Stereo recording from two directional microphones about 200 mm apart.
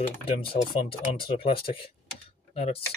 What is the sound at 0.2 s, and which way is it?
Speech, 25° left (ahead or behind).